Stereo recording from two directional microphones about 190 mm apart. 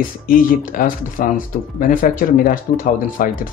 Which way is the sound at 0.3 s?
45° left (ahead or behind).